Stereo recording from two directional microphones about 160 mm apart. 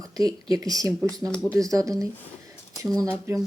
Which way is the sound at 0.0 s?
25° right (ahead or behind).